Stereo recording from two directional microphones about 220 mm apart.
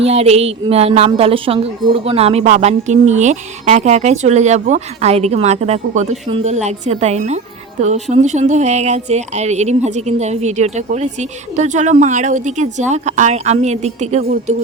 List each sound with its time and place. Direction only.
0.0 s a woman's voice: 30° right (ahead or behind)